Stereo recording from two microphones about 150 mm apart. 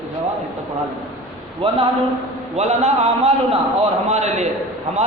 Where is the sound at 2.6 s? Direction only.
50° right (ahead or behind).